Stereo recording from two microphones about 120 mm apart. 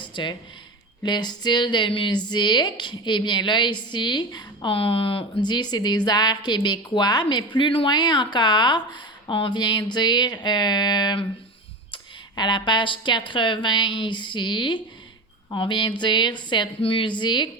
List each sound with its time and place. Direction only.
0.0 s a sound: 40° left (ahead or behind)
1.0 s speech: 35° left (ahead or behind)
5.5 s speech: 35° left (ahead or behind)
12.4 s speech: 40° left (ahead or behind)